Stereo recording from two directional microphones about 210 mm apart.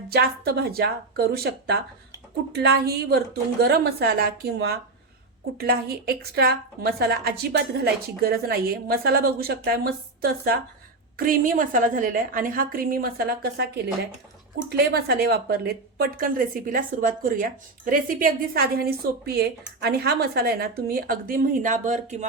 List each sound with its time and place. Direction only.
0.1 s a woman's voice: 50° right (ahead or behind)
14.7 s speech: 50° right (ahead or behind)